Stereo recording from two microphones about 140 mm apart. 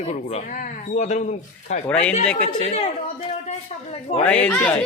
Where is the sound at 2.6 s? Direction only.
45° left (ahead or behind).